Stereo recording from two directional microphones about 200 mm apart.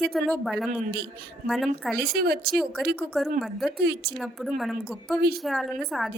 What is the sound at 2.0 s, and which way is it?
Speech, 50° right (ahead or behind).